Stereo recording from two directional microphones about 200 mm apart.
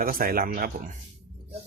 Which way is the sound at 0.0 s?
45° right (ahead or behind).